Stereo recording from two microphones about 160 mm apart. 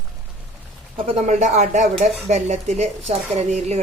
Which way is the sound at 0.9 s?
40° right (ahead or behind).